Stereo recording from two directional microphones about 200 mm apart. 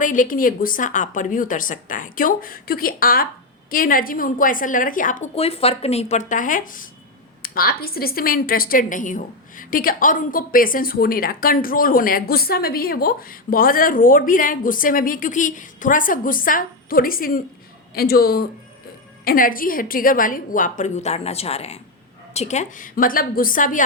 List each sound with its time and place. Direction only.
0.0 s a woman's voice: 40° left (ahead or behind)